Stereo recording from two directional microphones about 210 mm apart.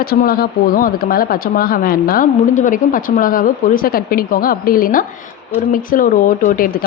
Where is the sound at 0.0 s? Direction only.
45° left (ahead or behind).